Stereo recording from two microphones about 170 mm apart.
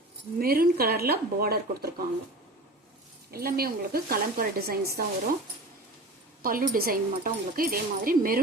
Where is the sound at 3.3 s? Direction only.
60° right (ahead or behind).